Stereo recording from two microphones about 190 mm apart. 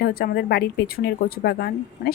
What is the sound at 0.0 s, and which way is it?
Speech, 55° left (ahead or behind).